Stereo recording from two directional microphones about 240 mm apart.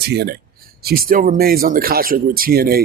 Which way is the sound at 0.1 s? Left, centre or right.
Right.